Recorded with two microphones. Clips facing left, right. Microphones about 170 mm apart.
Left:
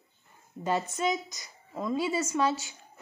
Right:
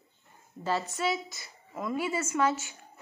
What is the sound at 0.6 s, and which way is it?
A woman's voice, 20° left (ahead or behind).